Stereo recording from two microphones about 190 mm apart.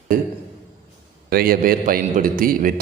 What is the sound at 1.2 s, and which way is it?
A man's voice, 50° right (ahead or behind).